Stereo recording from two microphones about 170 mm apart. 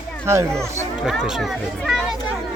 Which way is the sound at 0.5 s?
Centre (ahead or behind).